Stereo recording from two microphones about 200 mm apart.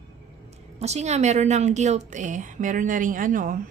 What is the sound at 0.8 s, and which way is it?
Speech, 35° right (ahead or behind).